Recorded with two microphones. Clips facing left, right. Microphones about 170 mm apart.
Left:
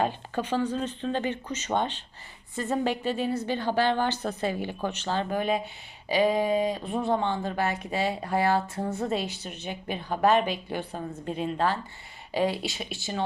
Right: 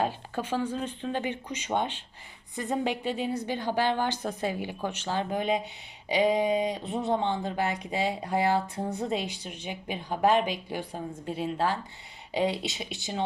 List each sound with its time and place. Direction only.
0.0 s a woman's voice: 10° right (ahead or behind)